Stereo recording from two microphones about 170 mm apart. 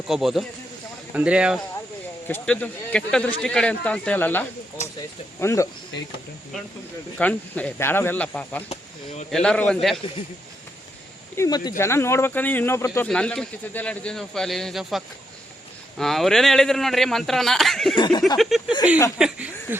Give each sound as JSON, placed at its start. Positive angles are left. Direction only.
{"t": 0.1, "sound": "speech", "side_deg": 0}
{"t": 2.2, "sound": "speech", "side_deg": 10}
{"t": 7.2, "sound": "speech", "side_deg": 10}
{"t": 11.3, "sound": "speech", "side_deg": 20}
{"t": 17.9, "sound": "a sound", "side_deg": 25}
{"t": 18.3, "sound": "speech", "side_deg": 0}